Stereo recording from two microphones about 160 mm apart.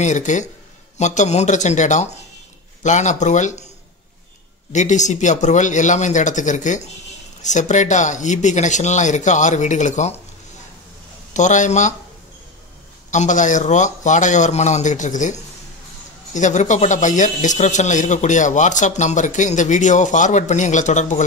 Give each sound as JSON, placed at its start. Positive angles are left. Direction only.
{"t": 0.0, "sound": "a man's voice", "side_deg": 50}
{"t": 4.7, "sound": "a man's voice", "side_deg": 50}
{"t": 11.3, "sound": "a man's voice", "side_deg": 50}
{"t": 13.1, "sound": "a man's voice", "side_deg": 50}